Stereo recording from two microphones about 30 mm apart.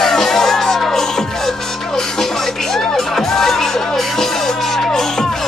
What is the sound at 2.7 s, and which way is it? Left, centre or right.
Music, centre.